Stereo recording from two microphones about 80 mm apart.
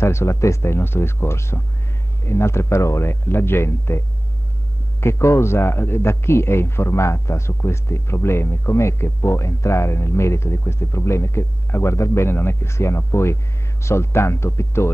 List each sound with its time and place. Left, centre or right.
0.0 s speech: left
5.0 s speech: left